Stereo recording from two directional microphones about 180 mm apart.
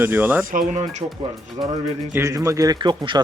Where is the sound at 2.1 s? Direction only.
15° right (ahead or behind).